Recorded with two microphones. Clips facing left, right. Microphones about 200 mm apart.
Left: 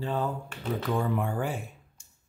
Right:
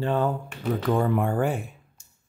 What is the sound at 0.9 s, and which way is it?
Speech, 55° right (ahead or behind).